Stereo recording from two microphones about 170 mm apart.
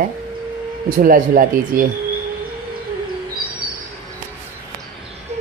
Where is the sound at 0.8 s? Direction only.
55° right (ahead or behind).